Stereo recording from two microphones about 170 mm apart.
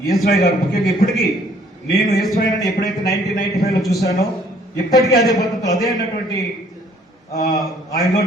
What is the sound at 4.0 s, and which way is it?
Speech, 20° left (ahead or behind).